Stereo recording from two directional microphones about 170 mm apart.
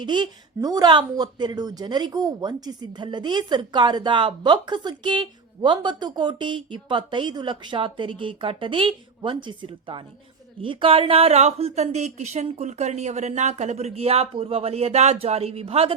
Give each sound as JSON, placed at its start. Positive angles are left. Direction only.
{"t": 0.0, "sound": "a woman's voice", "side_deg": -25}